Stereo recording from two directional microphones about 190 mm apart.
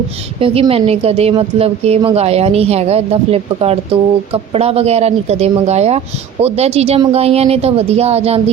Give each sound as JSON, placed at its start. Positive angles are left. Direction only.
{"t": 0.3, "sound": "a woman's voice", "side_deg": -30}